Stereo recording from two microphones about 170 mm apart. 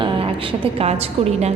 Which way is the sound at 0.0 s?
35° right (ahead or behind).